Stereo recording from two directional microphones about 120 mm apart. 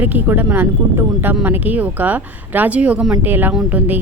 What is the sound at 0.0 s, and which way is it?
Speech, 15° right (ahead or behind).